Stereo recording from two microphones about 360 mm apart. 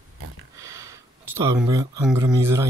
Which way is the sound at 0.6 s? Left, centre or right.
Centre.